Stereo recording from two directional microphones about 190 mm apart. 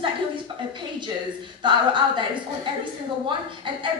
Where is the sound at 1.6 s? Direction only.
25° right (ahead or behind).